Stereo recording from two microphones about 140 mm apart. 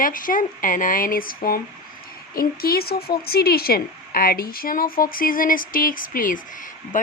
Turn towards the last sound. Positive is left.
turn(degrees=70)  # may be behind; listen again after turning